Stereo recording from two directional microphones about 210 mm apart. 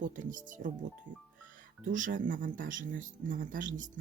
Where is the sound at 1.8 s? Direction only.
40° right (ahead or behind).